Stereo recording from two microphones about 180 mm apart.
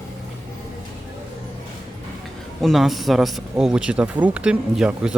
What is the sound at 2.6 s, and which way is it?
Speech, centre (ahead or behind).